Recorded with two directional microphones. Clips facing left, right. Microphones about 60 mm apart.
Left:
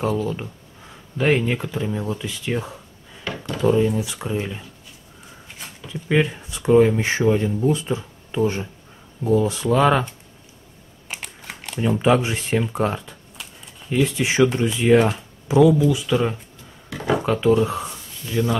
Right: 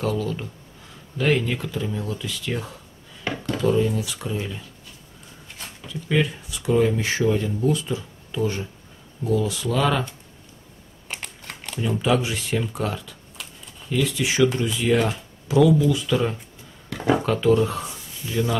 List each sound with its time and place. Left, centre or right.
0.0 s speech: left
5.9 s speech: left
11.1 s a sound: centre
12.0 s speech: left
13.4 s a sound: centre
13.8 s speech: left
15.8 s speech: centre
18.2 s speech: centre